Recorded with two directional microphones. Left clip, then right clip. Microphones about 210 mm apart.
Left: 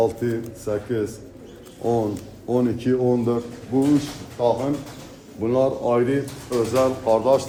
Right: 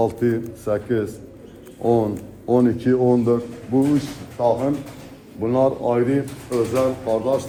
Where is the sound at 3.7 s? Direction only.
30° right (ahead or behind).